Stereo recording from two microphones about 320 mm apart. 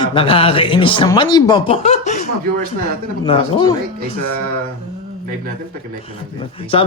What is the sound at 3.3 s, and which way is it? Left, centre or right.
Speech, centre.